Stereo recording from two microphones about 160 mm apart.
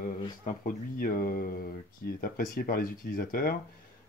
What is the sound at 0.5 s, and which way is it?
Speech, 60° left (ahead or behind).